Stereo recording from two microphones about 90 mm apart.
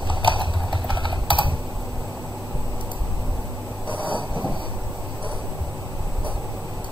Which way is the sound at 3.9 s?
65° left (ahead or behind).